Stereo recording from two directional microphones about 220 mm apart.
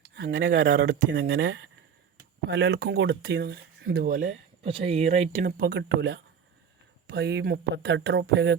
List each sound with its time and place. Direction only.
0.2 s speech: 45° right (ahead or behind)
0.9 s speech: 55° right (ahead or behind)
4.6 s speech: 25° right (ahead or behind)
5.5 s speech: 50° right (ahead or behind)